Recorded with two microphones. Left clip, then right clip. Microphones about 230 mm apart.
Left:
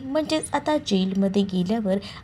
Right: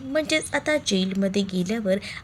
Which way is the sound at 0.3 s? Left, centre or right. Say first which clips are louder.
Even; centre.